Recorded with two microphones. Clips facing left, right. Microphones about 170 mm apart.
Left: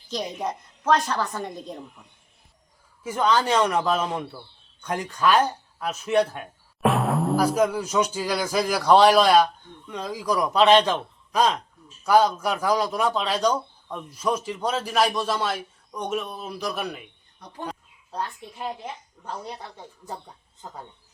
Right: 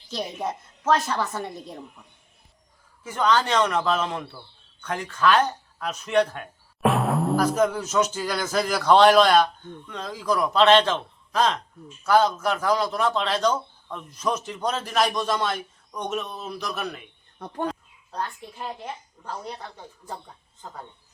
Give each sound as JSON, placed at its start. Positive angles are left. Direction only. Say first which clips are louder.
{"t": 0.3, "sound": "a woman's voice", "louder": "even", "side_deg": -5}
{"t": 3.0, "sound": "a man's voice", "louder": "even", "side_deg": 10}
{"t": 17.4, "sound": "speech", "louder": "right 7 dB", "side_deg": -55}